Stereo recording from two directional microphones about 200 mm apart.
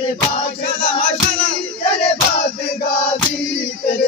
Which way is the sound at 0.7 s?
50° right (ahead or behind).